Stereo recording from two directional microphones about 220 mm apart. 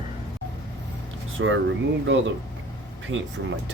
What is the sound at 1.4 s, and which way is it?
Speech, 60° right (ahead or behind).